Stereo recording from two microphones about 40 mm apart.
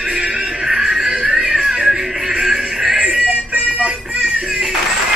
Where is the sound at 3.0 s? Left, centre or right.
Right.